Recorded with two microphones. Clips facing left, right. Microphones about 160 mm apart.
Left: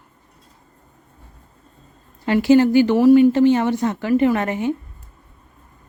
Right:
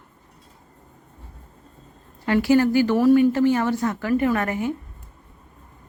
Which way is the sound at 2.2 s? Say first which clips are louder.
Left 4 dB; 20° left (ahead or behind).